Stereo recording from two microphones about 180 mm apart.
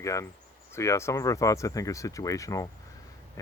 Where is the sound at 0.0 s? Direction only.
15° left (ahead or behind).